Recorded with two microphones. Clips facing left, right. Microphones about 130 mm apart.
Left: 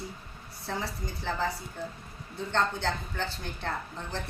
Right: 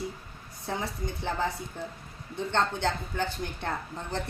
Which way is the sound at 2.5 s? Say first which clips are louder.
Right 1 dB; 20° right (ahead or behind).